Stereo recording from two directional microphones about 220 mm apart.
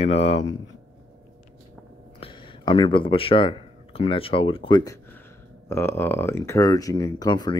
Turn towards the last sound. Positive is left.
turn(degrees=20)  # may be behind; listen again after turning